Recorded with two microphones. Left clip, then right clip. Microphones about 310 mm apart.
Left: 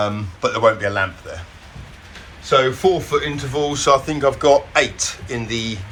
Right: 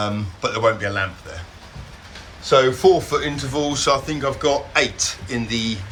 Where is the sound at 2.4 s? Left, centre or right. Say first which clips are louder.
Right 1 dB; centre.